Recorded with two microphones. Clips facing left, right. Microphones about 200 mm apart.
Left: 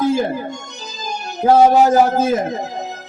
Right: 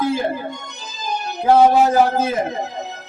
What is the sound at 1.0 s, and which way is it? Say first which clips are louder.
Speech: left 2 dB; 45° left (ahead or behind).